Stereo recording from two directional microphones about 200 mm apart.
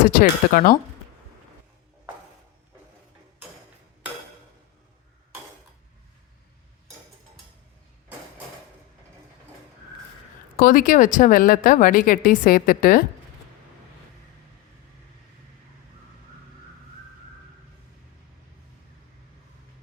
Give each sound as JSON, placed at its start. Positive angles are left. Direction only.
{"t": 0.0, "sound": "speech", "side_deg": 40}
{"t": 10.6, "sound": "speech", "side_deg": 45}